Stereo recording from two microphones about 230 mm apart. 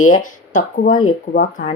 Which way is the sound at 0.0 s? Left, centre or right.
Left.